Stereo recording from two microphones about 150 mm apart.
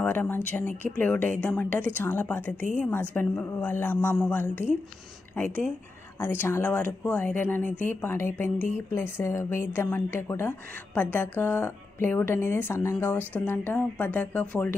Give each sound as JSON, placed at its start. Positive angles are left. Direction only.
{"t": 0.0, "sound": "speech", "side_deg": 10}
{"t": 0.6, "sound": "speech", "side_deg": -60}
{"t": 0.9, "sound": "speech", "side_deg": 10}